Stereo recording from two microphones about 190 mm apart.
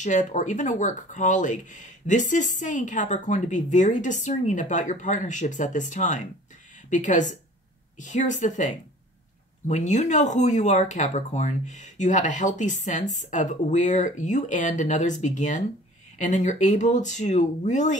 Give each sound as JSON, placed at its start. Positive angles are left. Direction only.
{"t": 0.0, "sound": "speech", "side_deg": 40}